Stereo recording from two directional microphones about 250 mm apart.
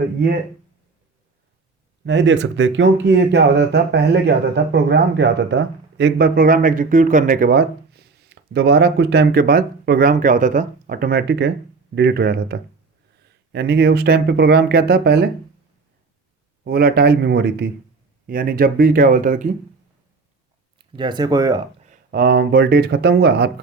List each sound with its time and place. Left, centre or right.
2.0 s speech: right
16.6 s speech: right
20.7 s speech: centre
21.8 s speech: right